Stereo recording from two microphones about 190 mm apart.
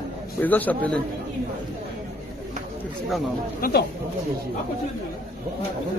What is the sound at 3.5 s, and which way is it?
Speech, 50° left (ahead or behind).